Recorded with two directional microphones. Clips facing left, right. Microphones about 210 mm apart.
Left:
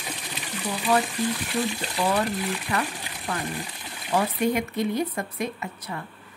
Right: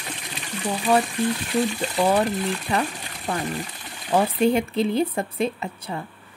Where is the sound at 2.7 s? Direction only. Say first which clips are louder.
Right 4 dB; 25° right (ahead or behind).